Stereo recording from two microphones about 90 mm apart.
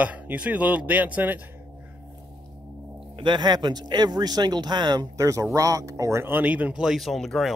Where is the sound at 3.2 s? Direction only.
55° right (ahead or behind); by 6.8 s 15° right (ahead or behind).